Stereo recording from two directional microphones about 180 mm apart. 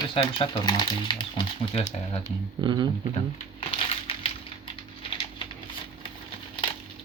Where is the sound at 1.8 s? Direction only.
40° left (ahead or behind).